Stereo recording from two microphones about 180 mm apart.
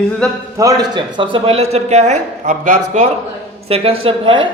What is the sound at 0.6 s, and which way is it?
A man's voice, 20° right (ahead or behind).